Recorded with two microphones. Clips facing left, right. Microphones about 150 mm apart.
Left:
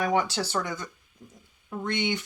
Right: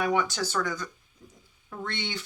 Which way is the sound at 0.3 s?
25° left (ahead or behind).